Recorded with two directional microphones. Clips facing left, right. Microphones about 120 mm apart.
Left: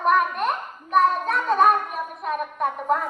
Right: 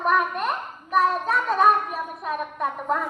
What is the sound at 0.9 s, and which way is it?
Child singing, centre (ahead or behind).